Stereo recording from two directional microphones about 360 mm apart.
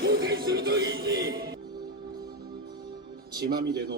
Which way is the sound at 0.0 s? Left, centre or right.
Right.